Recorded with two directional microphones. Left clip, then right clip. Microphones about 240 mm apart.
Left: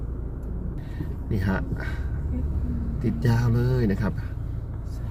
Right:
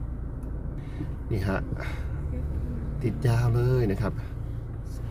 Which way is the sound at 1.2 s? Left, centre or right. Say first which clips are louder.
Left 1 dB; centre.